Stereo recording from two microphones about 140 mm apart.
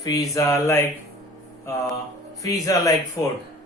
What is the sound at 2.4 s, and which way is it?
Speech, 25° left (ahead or behind).